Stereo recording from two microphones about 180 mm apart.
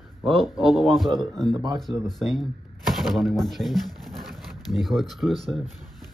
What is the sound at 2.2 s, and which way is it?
Speech, centre (ahead or behind).